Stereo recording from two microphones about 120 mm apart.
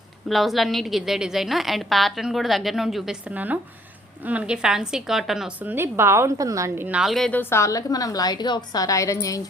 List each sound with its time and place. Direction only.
0.3 s a woman's voice: centre (ahead or behind)
5.5 s a woman's voice: 15° right (ahead or behind)
6.8 s a woman's voice: 5° right (ahead or behind)
7.3 s a woman's voice: 20° left (ahead or behind)